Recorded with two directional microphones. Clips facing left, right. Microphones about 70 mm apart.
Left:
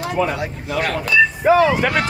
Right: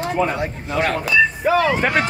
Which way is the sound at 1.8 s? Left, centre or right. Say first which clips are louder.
Even; right.